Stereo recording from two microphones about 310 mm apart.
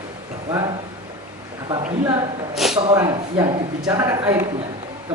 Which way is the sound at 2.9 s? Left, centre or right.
Centre.